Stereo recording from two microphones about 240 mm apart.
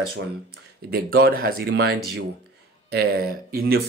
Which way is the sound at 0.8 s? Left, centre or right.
Right.